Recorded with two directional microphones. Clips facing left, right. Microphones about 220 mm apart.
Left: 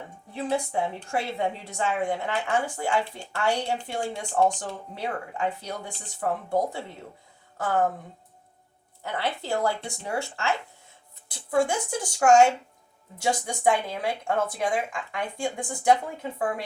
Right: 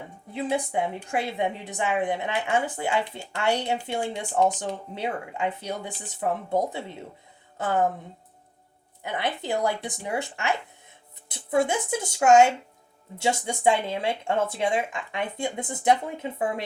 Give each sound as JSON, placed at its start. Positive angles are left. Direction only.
{"t": 0.3, "sound": "a woman's voice", "side_deg": -15}
{"t": 9.0, "sound": "a woman's voice", "side_deg": -20}